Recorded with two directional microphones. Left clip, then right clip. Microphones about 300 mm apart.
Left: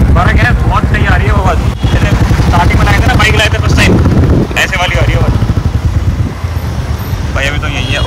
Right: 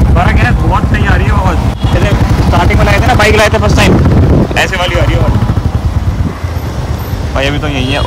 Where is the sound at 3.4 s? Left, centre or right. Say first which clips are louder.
Right 2 dB; centre.